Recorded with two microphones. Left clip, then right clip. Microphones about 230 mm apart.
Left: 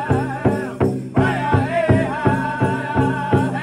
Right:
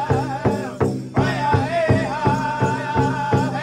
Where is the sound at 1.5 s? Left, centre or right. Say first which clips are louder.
Left 1 dB; right.